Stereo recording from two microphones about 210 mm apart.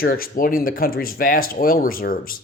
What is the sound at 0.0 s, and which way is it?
A man's voice, 45° left (ahead or behind).